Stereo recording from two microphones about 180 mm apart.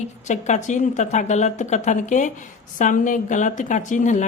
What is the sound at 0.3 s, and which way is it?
A woman's voice, 40° left (ahead or behind).